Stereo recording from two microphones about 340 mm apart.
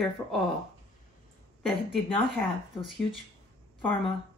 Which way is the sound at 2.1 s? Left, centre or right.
Centre.